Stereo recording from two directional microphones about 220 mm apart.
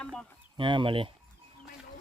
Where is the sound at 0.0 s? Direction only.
5° left (ahead or behind).